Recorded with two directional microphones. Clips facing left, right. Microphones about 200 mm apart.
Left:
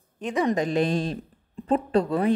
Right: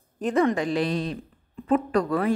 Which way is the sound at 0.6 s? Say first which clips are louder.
Left 2 dB; 45° left (ahead or behind).